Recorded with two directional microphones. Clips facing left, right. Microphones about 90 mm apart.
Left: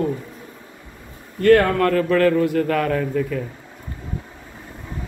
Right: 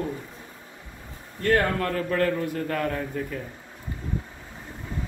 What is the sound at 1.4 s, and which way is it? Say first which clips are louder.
A man's voice: left 9 dB; 85° left.